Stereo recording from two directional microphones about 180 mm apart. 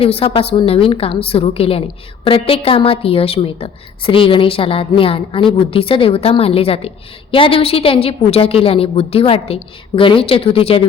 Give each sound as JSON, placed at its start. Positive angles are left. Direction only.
{"t": 0.0, "sound": "a woman's voice", "side_deg": 30}